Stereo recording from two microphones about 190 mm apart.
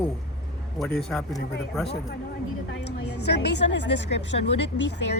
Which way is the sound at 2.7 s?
65° left (ahead or behind).